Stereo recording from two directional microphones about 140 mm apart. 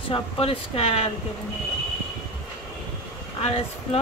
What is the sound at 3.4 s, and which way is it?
Speech, 45° left (ahead or behind).